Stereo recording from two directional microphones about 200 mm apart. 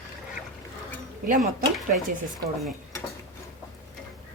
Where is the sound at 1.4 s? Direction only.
Centre (ahead or behind).